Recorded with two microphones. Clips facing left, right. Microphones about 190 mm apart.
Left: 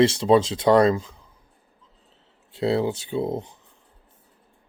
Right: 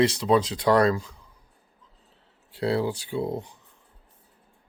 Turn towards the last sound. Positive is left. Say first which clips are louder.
# left 3 dB
turn(degrees=20)  # may be behind; listen again after turning